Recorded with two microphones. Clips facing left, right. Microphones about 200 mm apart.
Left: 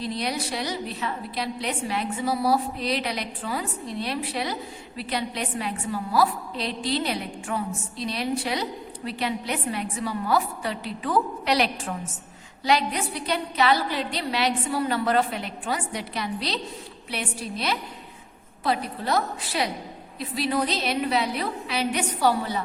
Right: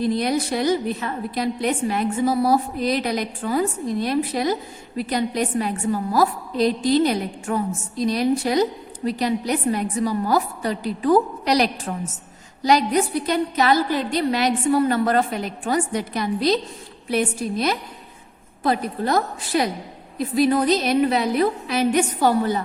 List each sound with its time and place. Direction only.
0.0 s a woman's voice: 50° right (ahead or behind)